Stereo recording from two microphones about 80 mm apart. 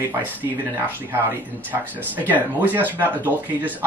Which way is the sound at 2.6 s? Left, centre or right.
Right.